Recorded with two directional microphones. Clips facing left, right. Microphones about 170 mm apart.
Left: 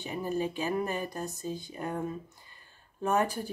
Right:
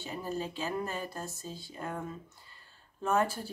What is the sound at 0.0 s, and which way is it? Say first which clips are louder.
Speech: left 4 dB; 15° left (ahead or behind).